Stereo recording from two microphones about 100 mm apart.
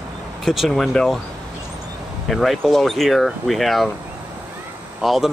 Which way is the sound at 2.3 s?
Centre (ahead or behind).